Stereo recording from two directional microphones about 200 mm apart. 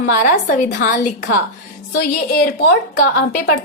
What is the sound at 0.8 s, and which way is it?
Speech, 40° left (ahead or behind).